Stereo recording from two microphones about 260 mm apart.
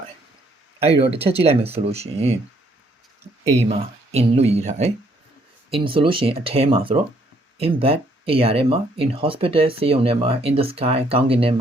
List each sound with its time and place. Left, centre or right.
0.8 s speech: right
3.7 s speech: right